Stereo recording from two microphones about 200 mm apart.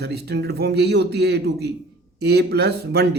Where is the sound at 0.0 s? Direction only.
55° right (ahead or behind).